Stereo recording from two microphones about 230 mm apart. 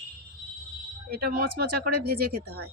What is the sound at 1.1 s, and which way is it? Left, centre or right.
Speech, right.